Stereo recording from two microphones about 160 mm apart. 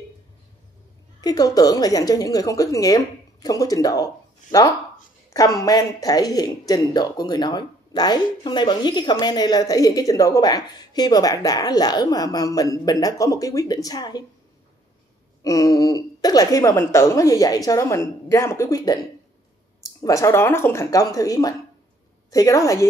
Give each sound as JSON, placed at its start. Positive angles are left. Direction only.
{"t": 1.2, "sound": "speech", "side_deg": 25}
{"t": 15.4, "sound": "speech", "side_deg": 20}
{"t": 20.0, "sound": "speech", "side_deg": 20}